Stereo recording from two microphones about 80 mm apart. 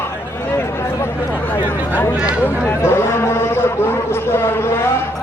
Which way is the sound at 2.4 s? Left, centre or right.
Left.